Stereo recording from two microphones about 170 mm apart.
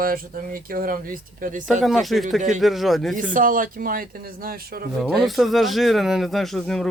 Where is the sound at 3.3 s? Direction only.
55° right (ahead or behind).